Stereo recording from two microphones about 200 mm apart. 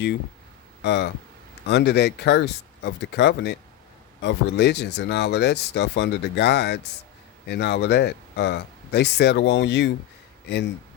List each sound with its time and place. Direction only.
0.8 s speech: 60° left (ahead or behind)